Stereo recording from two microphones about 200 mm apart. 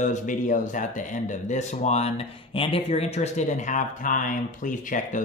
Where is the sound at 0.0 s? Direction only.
40° left (ahead or behind).